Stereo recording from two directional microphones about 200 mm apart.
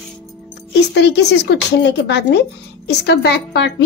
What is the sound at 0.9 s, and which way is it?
A woman's voice, 55° left (ahead or behind).